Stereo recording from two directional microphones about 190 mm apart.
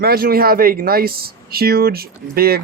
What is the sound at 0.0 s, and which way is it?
Speech, 50° right (ahead or behind).